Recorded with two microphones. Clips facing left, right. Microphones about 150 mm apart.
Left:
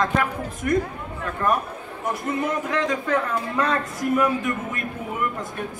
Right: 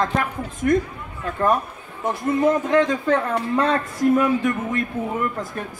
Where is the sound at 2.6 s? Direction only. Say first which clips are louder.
Right 6 dB; 30° right (ahead or behind).